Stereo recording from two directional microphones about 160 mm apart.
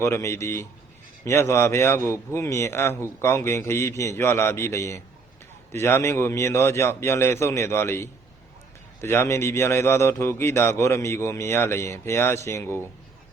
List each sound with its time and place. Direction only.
0.0 s a man's voice: 15° left (ahead or behind)